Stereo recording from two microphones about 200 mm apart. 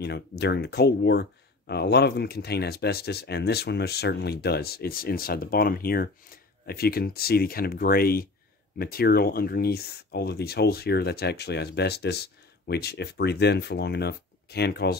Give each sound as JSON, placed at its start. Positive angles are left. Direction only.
{"t": 0.0, "sound": "speech", "side_deg": 55}